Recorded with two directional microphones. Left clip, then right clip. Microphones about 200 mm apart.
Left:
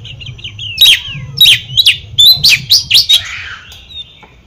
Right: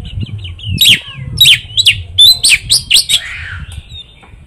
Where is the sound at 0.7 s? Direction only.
20° right (ahead or behind).